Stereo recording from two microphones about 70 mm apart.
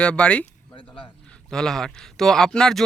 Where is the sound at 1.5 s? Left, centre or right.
Centre.